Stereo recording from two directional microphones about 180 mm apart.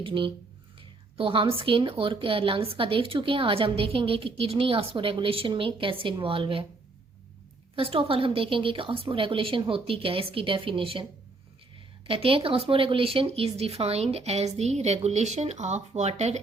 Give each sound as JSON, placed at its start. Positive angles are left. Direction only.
{"t": 0.0, "sound": "speech", "side_deg": -30}
{"t": 7.8, "sound": "speech", "side_deg": -30}
{"t": 12.0, "sound": "speech", "side_deg": -30}